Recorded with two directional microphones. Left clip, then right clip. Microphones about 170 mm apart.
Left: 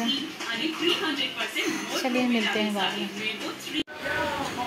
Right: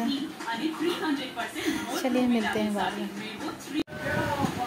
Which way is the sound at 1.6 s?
15° right (ahead or behind).